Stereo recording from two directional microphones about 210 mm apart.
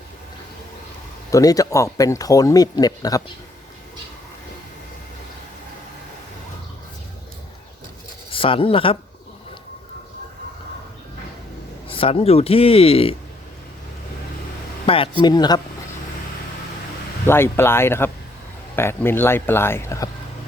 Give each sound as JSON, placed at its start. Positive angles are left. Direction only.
{"t": 1.3, "sound": "speech", "side_deg": 15}
{"t": 8.3, "sound": "speech", "side_deg": 25}
{"t": 11.9, "sound": "speech", "side_deg": 25}
{"t": 14.8, "sound": "speech", "side_deg": 25}
{"t": 17.2, "sound": "speech", "side_deg": 10}